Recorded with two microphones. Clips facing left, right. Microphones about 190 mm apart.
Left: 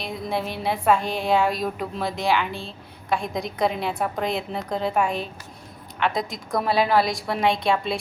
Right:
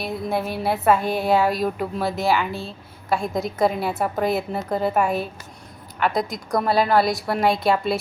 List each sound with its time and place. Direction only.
0.0 s a woman's voice: 5° right (ahead or behind)